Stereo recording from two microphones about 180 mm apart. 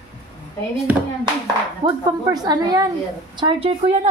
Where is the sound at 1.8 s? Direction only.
20° right (ahead or behind).